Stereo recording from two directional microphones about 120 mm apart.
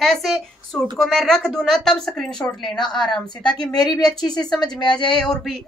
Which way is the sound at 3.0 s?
35° left (ahead or behind).